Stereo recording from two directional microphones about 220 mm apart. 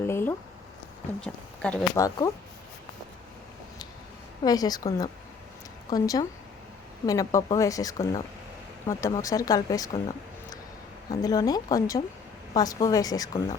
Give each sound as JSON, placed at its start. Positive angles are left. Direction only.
{"t": 0.0, "sound": "a sound", "side_deg": 10}
{"t": 1.2, "sound": "speech", "side_deg": 5}
{"t": 2.0, "sound": "speech", "side_deg": 15}
{"t": 4.4, "sound": "speech", "side_deg": 15}
{"t": 11.1, "sound": "speech", "side_deg": 15}